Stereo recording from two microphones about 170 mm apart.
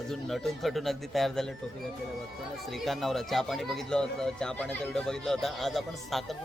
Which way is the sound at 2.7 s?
Centre (ahead or behind).